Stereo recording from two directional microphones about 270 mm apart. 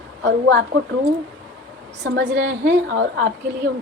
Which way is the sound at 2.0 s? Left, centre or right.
Right.